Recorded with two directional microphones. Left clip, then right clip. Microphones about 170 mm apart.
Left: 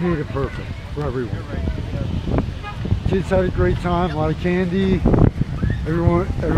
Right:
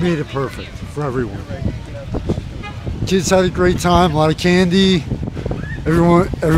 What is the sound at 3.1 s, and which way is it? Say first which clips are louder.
Speech: right 5 dB; 40° right (ahead or behind).